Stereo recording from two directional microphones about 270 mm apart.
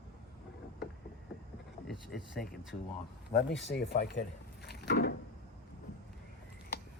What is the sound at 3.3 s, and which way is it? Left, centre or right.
Speech, left.